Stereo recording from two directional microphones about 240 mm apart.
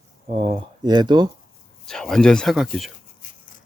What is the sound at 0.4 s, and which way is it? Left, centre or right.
Speech, centre.